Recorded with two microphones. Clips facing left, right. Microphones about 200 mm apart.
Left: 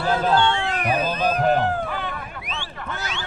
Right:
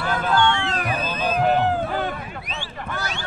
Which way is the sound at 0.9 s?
40° left (ahead or behind).